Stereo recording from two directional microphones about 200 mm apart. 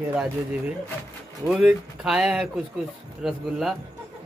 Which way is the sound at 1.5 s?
5° right (ahead or behind).